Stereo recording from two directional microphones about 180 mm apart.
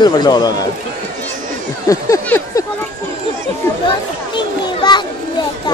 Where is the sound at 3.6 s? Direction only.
15° left (ahead or behind).